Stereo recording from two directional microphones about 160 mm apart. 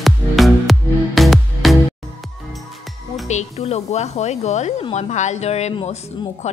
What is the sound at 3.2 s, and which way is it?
Music, 45° left (ahead or behind).